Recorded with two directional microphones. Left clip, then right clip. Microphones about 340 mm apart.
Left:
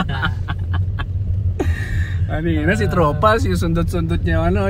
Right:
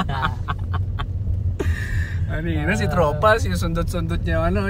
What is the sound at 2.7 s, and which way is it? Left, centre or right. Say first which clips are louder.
Speech: left 2 dB; centre.